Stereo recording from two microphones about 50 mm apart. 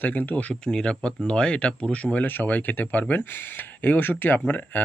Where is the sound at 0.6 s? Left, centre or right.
Centre.